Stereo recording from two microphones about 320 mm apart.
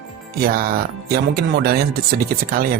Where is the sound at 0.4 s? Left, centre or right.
Right.